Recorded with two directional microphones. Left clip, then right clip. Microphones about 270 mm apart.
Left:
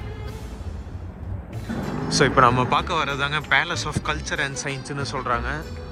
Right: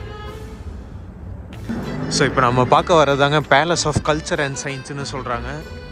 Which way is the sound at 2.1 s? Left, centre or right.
Centre.